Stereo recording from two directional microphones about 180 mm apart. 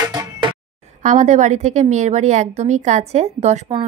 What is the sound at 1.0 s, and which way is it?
A woman's voice, 45° right (ahead or behind).